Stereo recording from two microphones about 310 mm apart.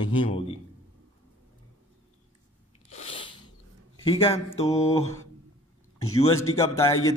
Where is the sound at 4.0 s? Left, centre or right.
Centre.